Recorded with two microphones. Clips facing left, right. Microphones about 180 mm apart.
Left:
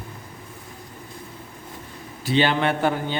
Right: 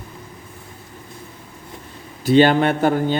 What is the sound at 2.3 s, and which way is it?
Speech, 45° right (ahead or behind).